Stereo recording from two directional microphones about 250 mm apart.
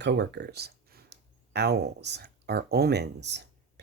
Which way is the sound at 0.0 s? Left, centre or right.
Right.